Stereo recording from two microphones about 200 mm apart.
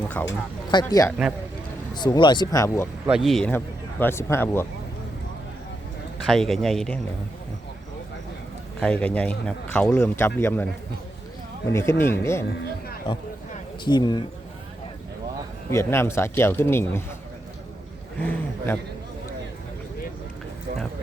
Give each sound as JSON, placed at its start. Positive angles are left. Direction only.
{"t": 0.2, "sound": "speech", "side_deg": 5}
{"t": 0.7, "sound": "speech", "side_deg": 20}
{"t": 3.1, "sound": "speech", "side_deg": 0}
{"t": 6.2, "sound": "speech", "side_deg": 0}
{"t": 8.8, "sound": "speech", "side_deg": 5}
{"t": 13.8, "sound": "speech", "side_deg": 20}
{"t": 15.7, "sound": "speech", "side_deg": 15}
{"t": 18.2, "sound": "speech", "side_deg": 10}